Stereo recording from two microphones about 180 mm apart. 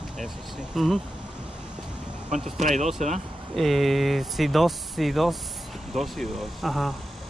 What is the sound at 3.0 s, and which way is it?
Speech, 40° right (ahead or behind).